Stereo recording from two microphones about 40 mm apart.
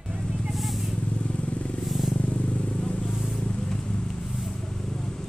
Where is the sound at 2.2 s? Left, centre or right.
Left.